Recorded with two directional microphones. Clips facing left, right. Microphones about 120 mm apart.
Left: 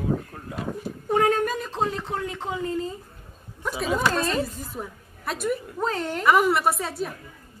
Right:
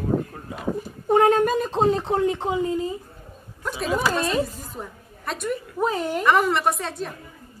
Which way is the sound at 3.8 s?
5° right (ahead or behind).